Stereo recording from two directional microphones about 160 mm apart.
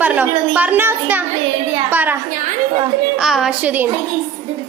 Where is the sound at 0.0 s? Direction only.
10° right (ahead or behind).